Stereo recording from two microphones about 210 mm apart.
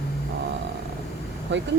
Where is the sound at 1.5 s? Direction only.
60° right (ahead or behind).